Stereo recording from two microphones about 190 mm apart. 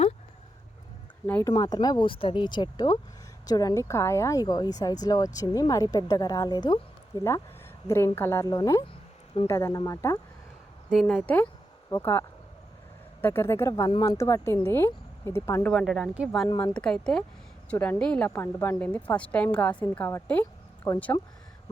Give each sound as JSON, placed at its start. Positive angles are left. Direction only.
{"t": 1.3, "sound": "speech", "side_deg": 15}
{"t": 7.9, "sound": "a woman's voice", "side_deg": 15}
{"t": 13.2, "sound": "a woman's voice", "side_deg": 15}
{"t": 15.7, "sound": "speech", "side_deg": 0}
{"t": 16.5, "sound": "speech", "side_deg": 20}
{"t": 16.7, "sound": "a woman's voice", "side_deg": 5}